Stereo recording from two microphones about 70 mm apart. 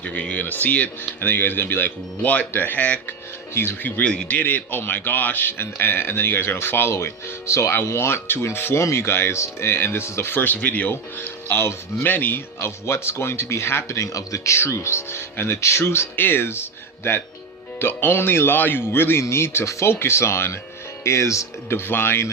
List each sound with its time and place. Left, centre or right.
0.0 s speech: left
3.5 s speech: left
4.1 s speech: centre
4.4 s speech: left